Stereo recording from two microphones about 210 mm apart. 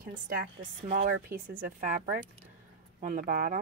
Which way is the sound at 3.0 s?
40° right (ahead or behind).